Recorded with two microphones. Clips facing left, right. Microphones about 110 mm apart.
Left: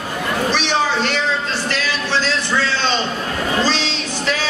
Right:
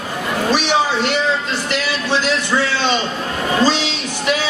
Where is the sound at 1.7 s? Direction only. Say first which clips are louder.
Right 4 dB; 15° right (ahead or behind).